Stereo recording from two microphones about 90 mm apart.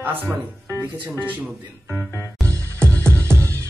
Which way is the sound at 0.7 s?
30° left (ahead or behind).